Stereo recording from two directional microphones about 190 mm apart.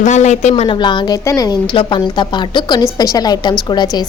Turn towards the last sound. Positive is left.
turn(degrees=20)  # may be behind; listen again after turning